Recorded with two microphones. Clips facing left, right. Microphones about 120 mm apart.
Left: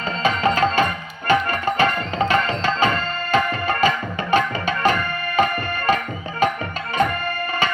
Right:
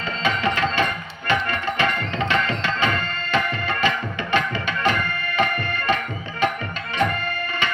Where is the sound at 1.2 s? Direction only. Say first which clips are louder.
Left 4 dB; 40° left (ahead or behind).